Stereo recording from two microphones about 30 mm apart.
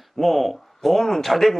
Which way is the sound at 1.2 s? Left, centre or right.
Centre.